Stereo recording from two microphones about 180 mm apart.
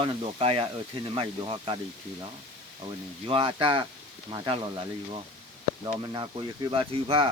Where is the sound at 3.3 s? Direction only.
30° right (ahead or behind).